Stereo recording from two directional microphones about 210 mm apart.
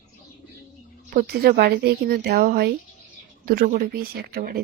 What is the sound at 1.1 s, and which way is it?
Speech, 45° right (ahead or behind).